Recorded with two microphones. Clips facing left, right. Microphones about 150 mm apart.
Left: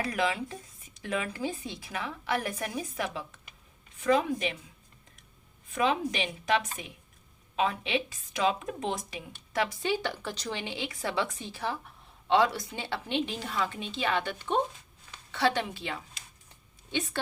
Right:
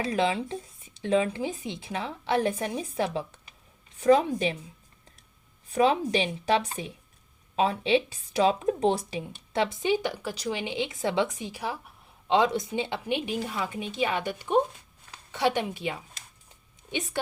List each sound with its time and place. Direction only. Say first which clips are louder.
0.1 s a woman's voice: right 4 dB; 25° right (ahead or behind)
5.6 s a woman's voice: right 5 dB; 35° right (ahead or behind); by 17.2 s 15° right (ahead or behind)